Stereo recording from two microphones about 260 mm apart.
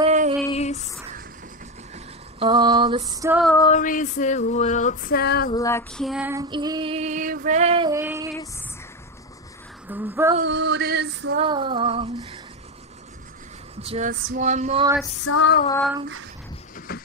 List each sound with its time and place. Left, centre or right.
0.0 s female singing: right
0.5 s a sound: left
2.3 s female singing: centre
3.6 s a sound: left
5.5 s female singing: centre
6.5 s music: centre
7.4 s speech: right
7.9 s speech: centre
9.8 s speech: centre
10.4 s male singing: right
11.3 s speech: centre
13.7 s speech: right
15.2 s female singing: left
16.7 s a sound: left